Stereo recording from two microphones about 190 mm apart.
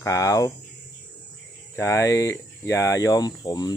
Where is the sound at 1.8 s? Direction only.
15° left (ahead or behind).